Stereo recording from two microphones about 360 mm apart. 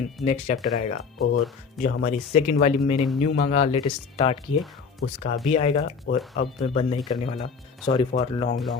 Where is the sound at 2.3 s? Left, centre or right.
Centre.